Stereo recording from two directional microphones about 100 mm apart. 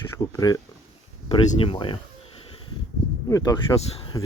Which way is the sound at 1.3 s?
65° left (ahead or behind).